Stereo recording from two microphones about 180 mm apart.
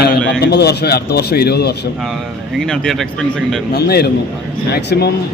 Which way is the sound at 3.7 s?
60° left (ahead or behind).